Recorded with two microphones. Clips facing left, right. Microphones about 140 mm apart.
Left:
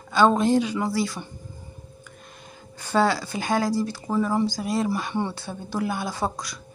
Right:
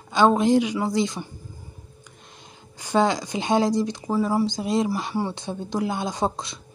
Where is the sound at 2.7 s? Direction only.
15° right (ahead or behind).